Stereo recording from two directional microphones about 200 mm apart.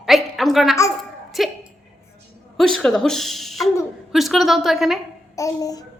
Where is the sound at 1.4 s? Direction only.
Centre (ahead or behind).